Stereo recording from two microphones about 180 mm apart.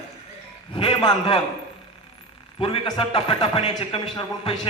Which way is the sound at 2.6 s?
30° left (ahead or behind).